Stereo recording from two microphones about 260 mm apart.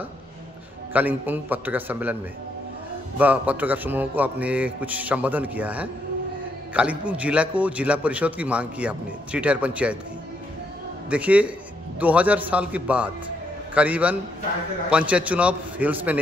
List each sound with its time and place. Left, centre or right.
0.9 s a man's voice: centre
3.2 s a man's voice: centre
11.1 s a man's voice: centre